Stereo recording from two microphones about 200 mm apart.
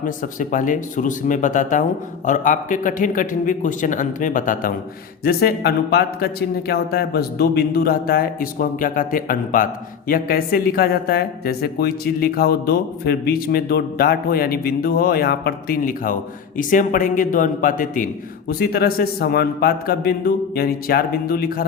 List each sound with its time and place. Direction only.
0.0 s a man's voice: 40° left (ahead or behind)